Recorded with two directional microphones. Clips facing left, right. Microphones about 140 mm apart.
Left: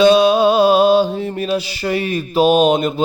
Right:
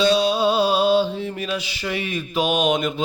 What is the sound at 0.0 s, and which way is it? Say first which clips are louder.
Mantra: left 7 dB; 55° left (ahead or behind).